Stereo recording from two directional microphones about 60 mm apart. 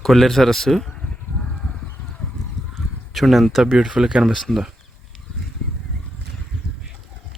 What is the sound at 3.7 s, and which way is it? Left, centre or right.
Speech, centre.